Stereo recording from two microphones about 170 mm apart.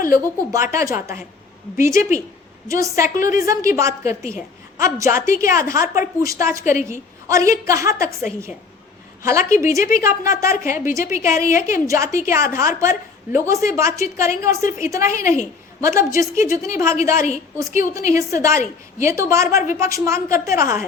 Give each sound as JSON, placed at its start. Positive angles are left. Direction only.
{"t": 0.7, "sound": "a woman's voice", "side_deg": -15}
{"t": 9.2, "sound": "a woman's voice", "side_deg": -15}
{"t": 17.2, "sound": "a woman's voice", "side_deg": 40}
{"t": 17.6, "sound": "a woman's voice", "side_deg": -20}